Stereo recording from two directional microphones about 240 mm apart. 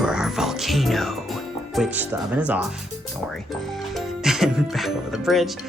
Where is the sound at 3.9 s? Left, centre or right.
Centre.